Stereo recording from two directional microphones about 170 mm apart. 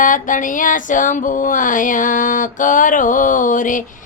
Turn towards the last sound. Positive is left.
turn(degrees=50)  # may be behind; listen again after turning